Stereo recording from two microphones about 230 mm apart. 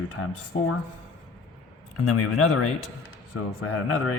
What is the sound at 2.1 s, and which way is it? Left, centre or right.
A man's voice, left.